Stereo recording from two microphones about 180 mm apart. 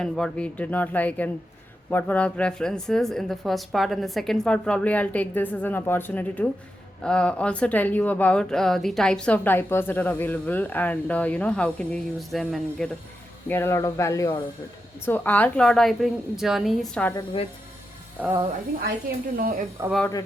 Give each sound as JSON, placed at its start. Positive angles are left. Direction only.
{"t": 0.0, "sound": "speech", "side_deg": 5}
{"t": 13.5, "sound": "speech", "side_deg": 15}
{"t": 18.2, "sound": "speech", "side_deg": -15}
{"t": 19.4, "sound": "speech", "side_deg": -50}